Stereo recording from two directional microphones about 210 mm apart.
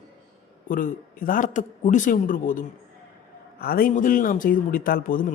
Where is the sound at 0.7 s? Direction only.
40° left (ahead or behind).